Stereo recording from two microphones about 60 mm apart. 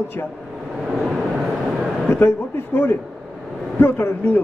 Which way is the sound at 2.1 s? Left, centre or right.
Left.